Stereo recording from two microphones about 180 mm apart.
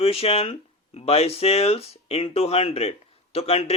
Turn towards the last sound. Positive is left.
turn(degrees=35)  # may be behind; listen again after turning